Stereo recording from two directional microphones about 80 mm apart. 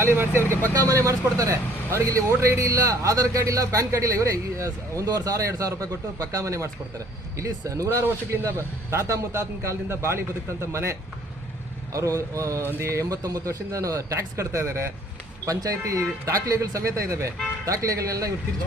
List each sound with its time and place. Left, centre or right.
0.0 s a man's voice: right
0.8 s a man's voice: right
7.9 s a man's voice: right
11.9 s a man's voice: right
15.4 s a man's voice: right